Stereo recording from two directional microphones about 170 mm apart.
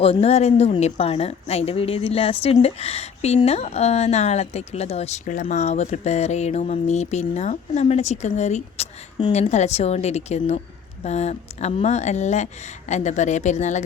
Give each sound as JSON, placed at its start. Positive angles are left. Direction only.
{"t": 0.0, "sound": "a woman's voice", "side_deg": 35}